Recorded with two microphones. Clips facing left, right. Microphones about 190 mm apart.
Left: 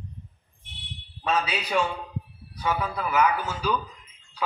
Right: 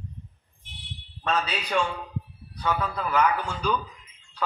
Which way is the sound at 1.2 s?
10° left (ahead or behind).